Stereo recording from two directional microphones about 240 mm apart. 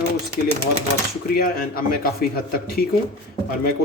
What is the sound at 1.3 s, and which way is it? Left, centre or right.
Speech, left.